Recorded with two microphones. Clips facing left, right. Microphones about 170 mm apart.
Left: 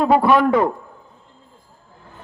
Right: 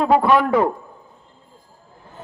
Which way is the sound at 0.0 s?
5° left (ahead or behind).